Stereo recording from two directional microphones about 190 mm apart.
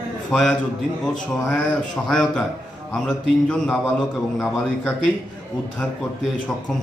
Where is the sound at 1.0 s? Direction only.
5° left (ahead or behind).